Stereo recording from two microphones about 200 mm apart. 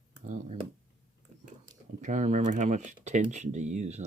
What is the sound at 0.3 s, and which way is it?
Speech, 35° right (ahead or behind).